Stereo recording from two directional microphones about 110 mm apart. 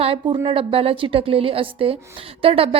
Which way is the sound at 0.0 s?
50° right (ahead or behind).